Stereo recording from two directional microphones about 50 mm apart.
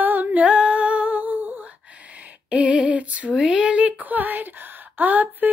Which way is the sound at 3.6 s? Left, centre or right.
Right.